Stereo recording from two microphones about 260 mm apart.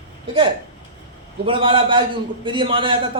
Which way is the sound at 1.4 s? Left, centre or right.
Centre.